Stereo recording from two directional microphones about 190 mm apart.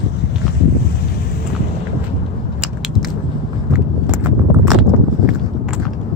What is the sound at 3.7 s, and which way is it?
Vehicle, 10° right (ahead or behind).